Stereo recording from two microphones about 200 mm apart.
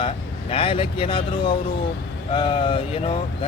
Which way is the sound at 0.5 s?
25° left (ahead or behind).